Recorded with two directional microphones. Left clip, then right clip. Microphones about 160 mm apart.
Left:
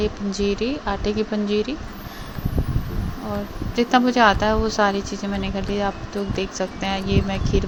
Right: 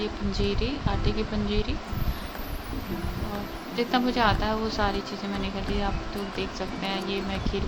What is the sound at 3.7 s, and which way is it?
Speech, 45° left (ahead or behind).